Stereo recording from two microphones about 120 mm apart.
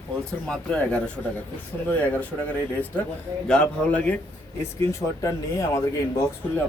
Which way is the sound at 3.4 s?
5° left (ahead or behind).